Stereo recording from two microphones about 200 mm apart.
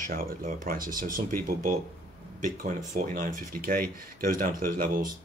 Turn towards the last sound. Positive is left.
turn(degrees=-45)  # may be behind; listen again after turning